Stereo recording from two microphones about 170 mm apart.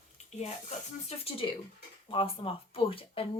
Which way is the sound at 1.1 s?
35° left (ahead or behind).